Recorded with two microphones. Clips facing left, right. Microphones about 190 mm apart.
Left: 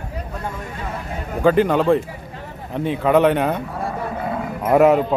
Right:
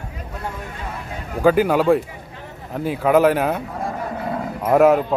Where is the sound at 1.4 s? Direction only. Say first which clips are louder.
Even; 5° right (ahead or behind).